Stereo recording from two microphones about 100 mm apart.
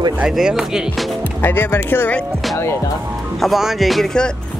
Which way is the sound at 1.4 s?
20° left (ahead or behind).